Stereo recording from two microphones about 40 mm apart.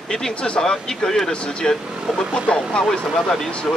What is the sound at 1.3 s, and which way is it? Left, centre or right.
Speech, left.